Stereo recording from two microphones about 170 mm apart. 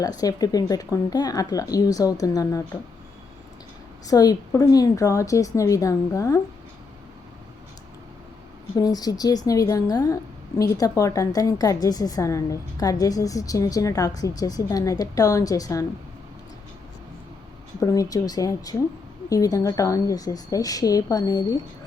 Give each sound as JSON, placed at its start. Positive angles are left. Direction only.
{"t": 0.2, "sound": "a woman's voice", "side_deg": 20}
{"t": 4.0, "sound": "a woman's voice", "side_deg": 20}
{"t": 8.7, "sound": "a woman's voice", "side_deg": 20}
{"t": 17.7, "sound": "a woman's voice", "side_deg": 20}